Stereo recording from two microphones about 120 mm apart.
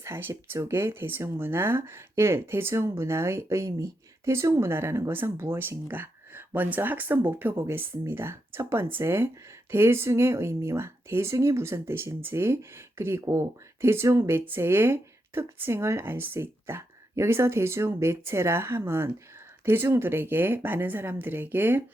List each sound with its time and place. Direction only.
0.0 s speech: 20° right (ahead or behind)